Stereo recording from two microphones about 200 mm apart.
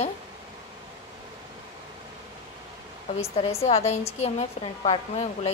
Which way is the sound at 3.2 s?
30° left (ahead or behind).